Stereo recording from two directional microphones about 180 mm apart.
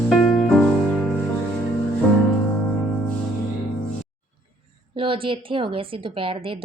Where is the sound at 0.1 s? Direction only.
Centre (ahead or behind).